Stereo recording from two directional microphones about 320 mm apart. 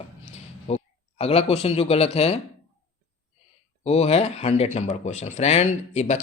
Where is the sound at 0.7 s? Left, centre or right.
Centre.